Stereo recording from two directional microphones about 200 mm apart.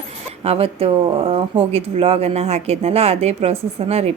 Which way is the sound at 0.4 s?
30° right (ahead or behind).